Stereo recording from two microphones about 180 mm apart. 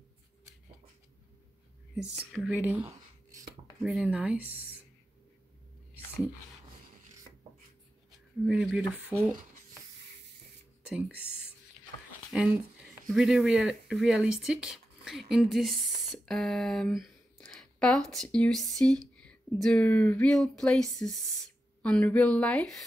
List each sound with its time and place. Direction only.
2.3 s speech: 5° right (ahead or behind)
8.5 s speech: 5° right (ahead or behind)
10.9 s speech: 5° right (ahead or behind)
12.3 s speech: 5° right (ahead or behind)